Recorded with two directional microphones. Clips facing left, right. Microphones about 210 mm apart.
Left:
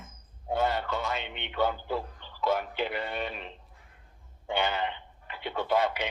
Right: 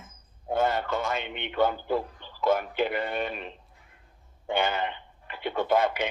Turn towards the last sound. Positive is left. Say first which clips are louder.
# right 3 dB
turn(degrees=-50)  # may be behind; listen again after turning